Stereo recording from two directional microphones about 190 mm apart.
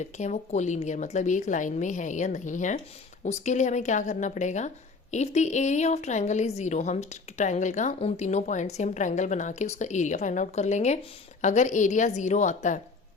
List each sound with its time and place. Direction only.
0.0 s a woman's voice: 35° left (ahead or behind)